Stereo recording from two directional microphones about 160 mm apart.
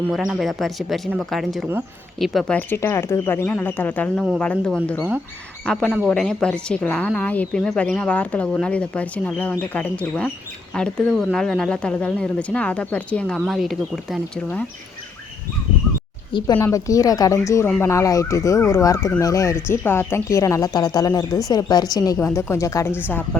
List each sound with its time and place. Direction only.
0.1 s a woman's voice: centre (ahead or behind)
16.6 s speech: 15° left (ahead or behind)